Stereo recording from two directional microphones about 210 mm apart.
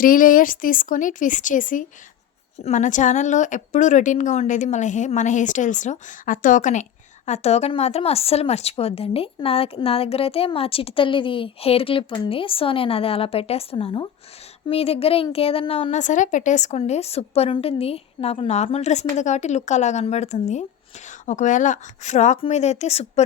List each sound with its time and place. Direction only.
0.0 s a woman's voice: 40° left (ahead or behind)